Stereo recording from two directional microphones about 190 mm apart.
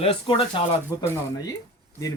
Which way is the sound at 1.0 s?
15° left (ahead or behind).